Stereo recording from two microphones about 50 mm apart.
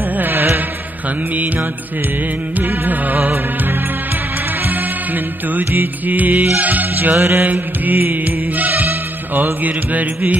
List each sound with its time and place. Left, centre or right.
0.1 s music: right
1.3 s music: right